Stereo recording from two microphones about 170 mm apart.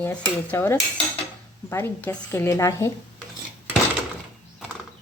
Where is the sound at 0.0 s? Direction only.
10° left (ahead or behind).